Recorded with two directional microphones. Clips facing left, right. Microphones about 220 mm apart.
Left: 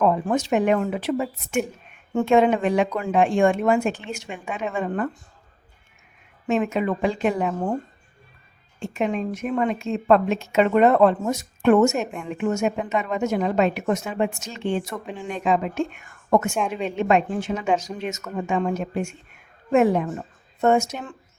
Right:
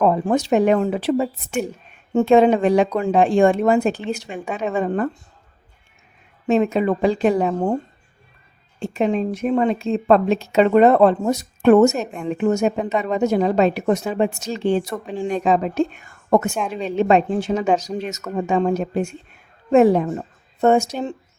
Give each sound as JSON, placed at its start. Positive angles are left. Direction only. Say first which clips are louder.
{"t": 0.0, "sound": "a woman's voice", "louder": "right 3 dB", "side_deg": -35}
{"t": 6.5, "sound": "a woman's voice", "louder": "right 5 dB", "side_deg": -35}
{"t": 8.8, "sound": "a woman's voice", "louder": "right 5 dB", "side_deg": -30}